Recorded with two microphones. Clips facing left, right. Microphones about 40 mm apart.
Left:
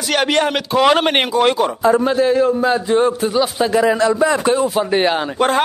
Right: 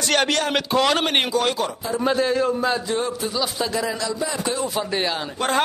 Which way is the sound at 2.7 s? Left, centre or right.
Left.